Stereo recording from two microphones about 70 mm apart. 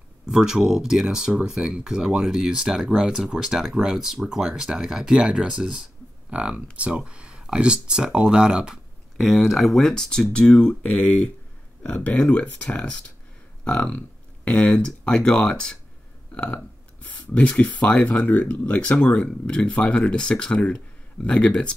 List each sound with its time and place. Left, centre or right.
0.3 s speech: centre
17.0 s speech: left